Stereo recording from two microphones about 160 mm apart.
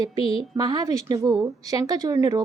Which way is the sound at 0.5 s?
25° right (ahead or behind).